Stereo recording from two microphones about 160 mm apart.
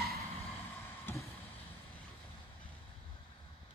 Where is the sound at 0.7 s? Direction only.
15° left (ahead or behind).